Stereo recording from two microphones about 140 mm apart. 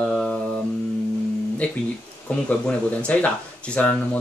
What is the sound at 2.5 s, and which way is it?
Speech, 10° left (ahead or behind).